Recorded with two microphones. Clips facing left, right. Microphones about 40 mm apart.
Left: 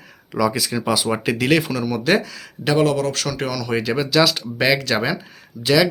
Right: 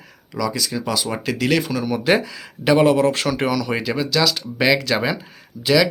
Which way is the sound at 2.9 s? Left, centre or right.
Right.